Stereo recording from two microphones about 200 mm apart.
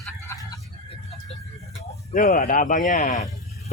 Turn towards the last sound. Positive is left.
turn(degrees=35)  # may be behind; listen again after turning